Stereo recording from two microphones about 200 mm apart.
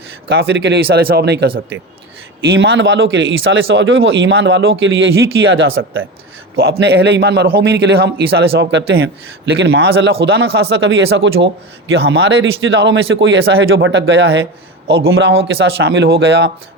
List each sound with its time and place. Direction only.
0.3 s speech: 60° right (ahead or behind)
2.5 s speech: 70° right (ahead or behind)
6.6 s speech: 55° right (ahead or behind)
9.5 s speech: 60° right (ahead or behind)